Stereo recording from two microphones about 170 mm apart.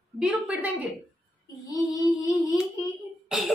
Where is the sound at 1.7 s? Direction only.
20° left (ahead or behind).